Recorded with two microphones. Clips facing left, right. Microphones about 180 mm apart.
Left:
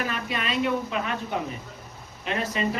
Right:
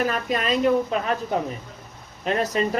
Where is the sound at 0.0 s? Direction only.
40° right (ahead or behind).